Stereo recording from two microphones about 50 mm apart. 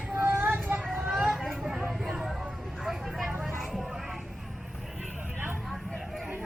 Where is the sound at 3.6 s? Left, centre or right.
Centre.